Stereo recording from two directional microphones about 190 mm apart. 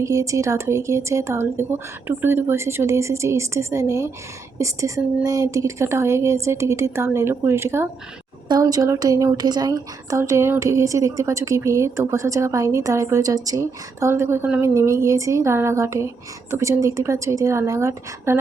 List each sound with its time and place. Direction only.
0.0 s a woman's voice: 15° right (ahead or behind)